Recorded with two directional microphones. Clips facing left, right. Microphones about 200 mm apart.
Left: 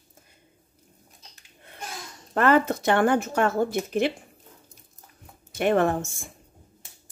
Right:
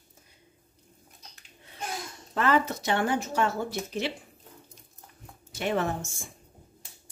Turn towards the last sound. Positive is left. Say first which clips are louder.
# left 7 dB
turn(degrees=55)  # may be behind; listen again after turning